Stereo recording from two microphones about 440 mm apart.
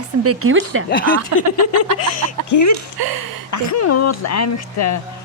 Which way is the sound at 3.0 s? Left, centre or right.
Right.